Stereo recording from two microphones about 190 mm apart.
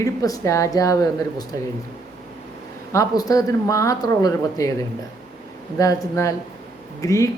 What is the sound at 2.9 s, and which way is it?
A man's voice, 15° left (ahead or behind).